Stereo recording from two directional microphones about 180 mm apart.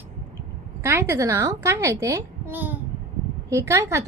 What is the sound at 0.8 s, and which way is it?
A woman's voice, 15° right (ahead or behind).